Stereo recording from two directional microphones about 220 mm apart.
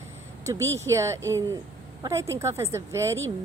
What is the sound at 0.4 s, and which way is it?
Speech, 15° right (ahead or behind).